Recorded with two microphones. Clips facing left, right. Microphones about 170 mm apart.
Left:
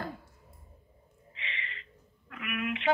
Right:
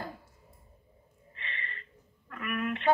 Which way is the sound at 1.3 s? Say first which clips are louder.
Even; 50° right (ahead or behind).